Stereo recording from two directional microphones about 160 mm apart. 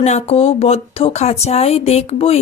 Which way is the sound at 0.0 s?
45° left (ahead or behind).